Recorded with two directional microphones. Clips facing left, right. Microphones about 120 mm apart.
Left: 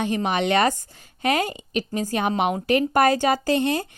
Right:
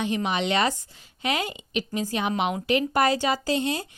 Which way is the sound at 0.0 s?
45° left (ahead or behind).